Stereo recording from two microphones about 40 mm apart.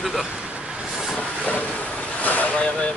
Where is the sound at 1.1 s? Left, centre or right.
Left.